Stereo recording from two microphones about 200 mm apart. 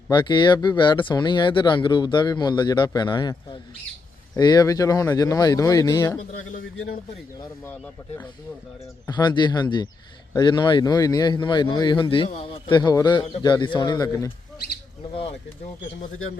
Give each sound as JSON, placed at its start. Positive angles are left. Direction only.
{"t": 0.1, "sound": "speech", "side_deg": 25}
{"t": 7.3, "sound": "speech", "side_deg": 15}
{"t": 9.0, "sound": "speech", "side_deg": 20}
{"t": 15.1, "sound": "speech", "side_deg": 30}